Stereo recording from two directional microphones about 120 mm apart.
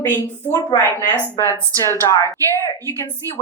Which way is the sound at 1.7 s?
30° right (ahead or behind).